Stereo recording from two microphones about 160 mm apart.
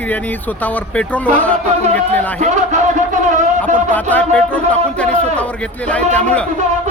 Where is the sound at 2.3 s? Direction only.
45° right (ahead or behind).